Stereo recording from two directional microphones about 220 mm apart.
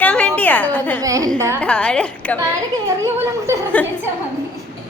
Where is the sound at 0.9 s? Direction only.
15° right (ahead or behind).